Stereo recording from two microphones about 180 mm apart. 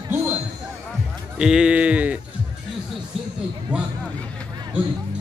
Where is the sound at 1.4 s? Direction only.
5° right (ahead or behind).